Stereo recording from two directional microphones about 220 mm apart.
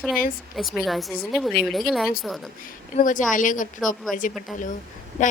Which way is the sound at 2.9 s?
35° left (ahead or behind).